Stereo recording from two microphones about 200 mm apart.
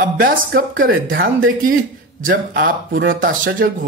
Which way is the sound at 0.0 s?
45° right (ahead or behind).